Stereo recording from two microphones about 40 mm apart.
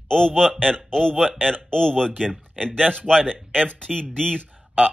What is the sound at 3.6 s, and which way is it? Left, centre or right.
Speech, left.